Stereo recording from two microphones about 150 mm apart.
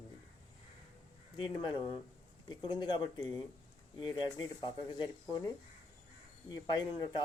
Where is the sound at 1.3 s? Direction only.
30° left (ahead or behind).